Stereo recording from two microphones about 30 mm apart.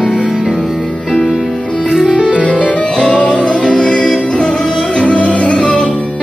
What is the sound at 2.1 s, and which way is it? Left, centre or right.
Music, right.